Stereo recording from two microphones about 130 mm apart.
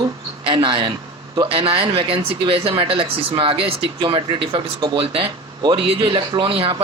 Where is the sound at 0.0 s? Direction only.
40° right (ahead or behind).